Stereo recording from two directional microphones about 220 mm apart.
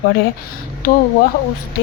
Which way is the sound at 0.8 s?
40° left (ahead or behind).